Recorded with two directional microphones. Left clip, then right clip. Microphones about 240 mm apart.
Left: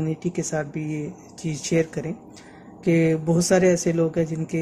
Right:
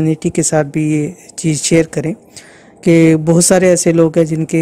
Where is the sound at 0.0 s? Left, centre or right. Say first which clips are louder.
Right 12 dB; right.